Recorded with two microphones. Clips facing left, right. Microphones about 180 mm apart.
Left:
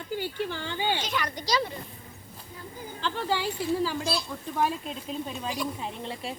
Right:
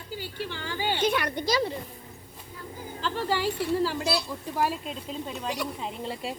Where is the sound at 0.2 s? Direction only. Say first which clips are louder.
Left 3 dB; 45° left (ahead or behind).